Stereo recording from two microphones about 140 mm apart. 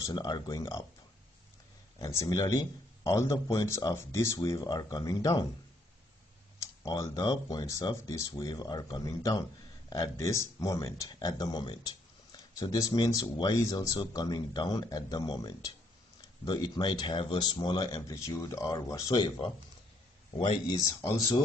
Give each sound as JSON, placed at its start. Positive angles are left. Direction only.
{"t": 0.0, "sound": "speech", "side_deg": 30}
{"t": 2.0, "sound": "speech", "side_deg": 20}
{"t": 6.8, "sound": "speech", "side_deg": 30}
{"t": 20.3, "sound": "speech", "side_deg": 40}